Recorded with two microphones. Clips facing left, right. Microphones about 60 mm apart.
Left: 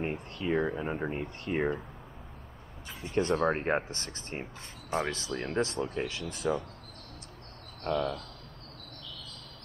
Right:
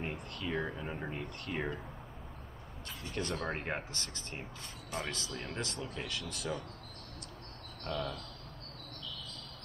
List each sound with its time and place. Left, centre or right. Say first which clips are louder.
0.0 s speech: left 6 dB; left
3.1 s speech: left 10 dB; left
6.4 s speech: left 9 dB; centre
7.8 s speech: left 7 dB; left